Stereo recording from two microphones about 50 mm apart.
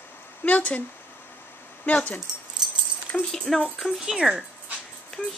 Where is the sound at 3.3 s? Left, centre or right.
Centre.